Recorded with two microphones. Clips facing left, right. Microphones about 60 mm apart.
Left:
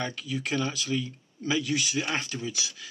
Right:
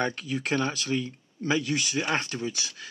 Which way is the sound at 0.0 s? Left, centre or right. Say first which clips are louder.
Right 3 dB; right.